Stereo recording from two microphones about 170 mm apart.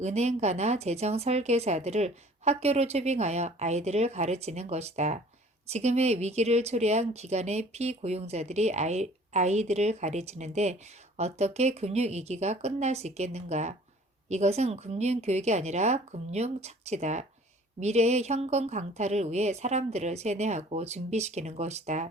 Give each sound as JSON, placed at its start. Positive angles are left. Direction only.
{"t": 0.0, "sound": "speech", "side_deg": -40}